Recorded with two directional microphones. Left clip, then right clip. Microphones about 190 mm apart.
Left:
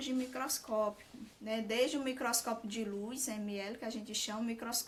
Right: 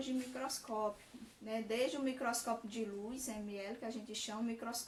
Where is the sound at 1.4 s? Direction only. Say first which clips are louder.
Left 4 dB; 50° left (ahead or behind).